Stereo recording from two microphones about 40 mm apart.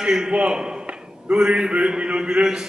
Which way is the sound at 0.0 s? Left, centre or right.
Centre.